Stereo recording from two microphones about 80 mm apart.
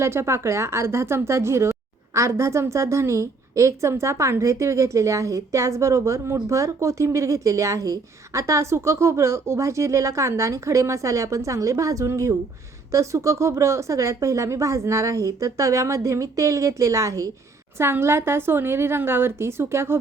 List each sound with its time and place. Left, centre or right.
0.0 s a woman's voice: right